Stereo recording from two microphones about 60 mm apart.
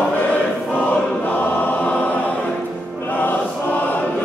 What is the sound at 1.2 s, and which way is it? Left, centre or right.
Choir, left.